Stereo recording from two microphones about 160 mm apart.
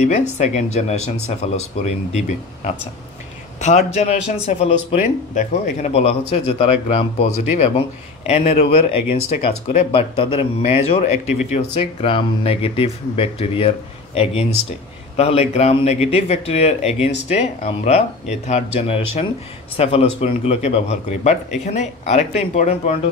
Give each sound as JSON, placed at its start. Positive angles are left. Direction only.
{"t": 0.4, "sound": "speech", "side_deg": 45}